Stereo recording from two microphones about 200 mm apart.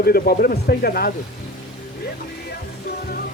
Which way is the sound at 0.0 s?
50° left (ahead or behind).